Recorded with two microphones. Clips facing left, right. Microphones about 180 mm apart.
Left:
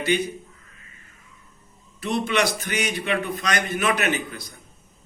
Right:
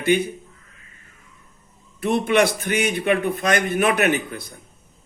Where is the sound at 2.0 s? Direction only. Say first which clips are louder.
Right 5 dB; 55° right (ahead or behind).